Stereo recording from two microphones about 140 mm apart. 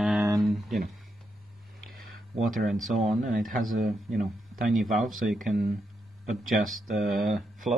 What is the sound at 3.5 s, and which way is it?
Speech, 80° right.